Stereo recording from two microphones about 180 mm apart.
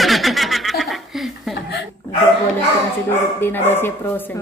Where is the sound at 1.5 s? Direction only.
65° left (ahead or behind).